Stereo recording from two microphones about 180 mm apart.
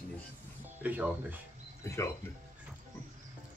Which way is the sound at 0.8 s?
10° right (ahead or behind).